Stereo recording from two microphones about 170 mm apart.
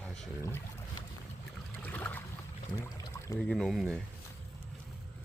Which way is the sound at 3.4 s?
Centre (ahead or behind).